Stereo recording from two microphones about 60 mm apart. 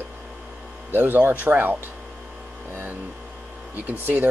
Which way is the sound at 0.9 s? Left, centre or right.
Right.